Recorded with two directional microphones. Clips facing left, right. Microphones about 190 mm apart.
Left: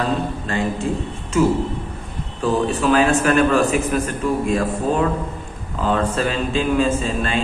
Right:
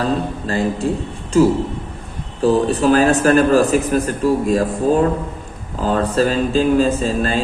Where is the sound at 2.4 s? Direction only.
40° right (ahead or behind).